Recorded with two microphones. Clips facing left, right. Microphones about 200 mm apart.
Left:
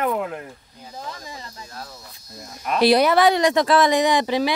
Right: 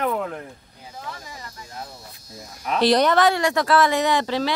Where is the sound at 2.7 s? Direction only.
10° left (ahead or behind).